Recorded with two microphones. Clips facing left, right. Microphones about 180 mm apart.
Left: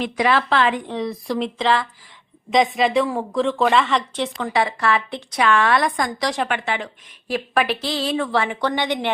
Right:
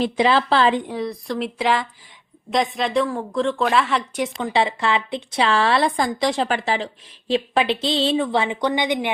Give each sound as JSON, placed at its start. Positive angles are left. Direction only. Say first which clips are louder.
{"t": 0.0, "sound": "speech", "louder": "right 2 dB", "side_deg": -30}
{"t": 0.9, "sound": "a woman's voice", "louder": "left 1 dB", "side_deg": 0}
{"t": 1.6, "sound": "speech", "louder": "even", "side_deg": -15}
{"t": 2.5, "sound": "a woman's voice", "louder": "left 3 dB", "side_deg": 0}
{"t": 4.4, "sound": "a woman's voice", "louder": "right 1 dB", "side_deg": -25}